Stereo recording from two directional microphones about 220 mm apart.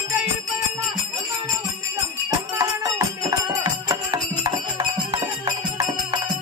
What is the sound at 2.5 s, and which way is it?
Music, 15° right (ahead or behind).